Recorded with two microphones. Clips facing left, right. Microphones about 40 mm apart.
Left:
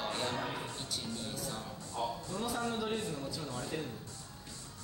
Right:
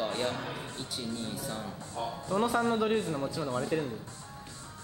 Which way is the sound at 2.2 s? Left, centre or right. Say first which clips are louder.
Right 8 dB; right.